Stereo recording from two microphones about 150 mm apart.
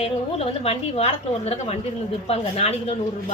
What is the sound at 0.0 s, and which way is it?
A woman's voice, 40° left (ahead or behind).